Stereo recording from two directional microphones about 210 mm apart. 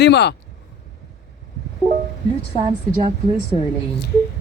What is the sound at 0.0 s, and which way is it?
Speech, 55° left (ahead or behind).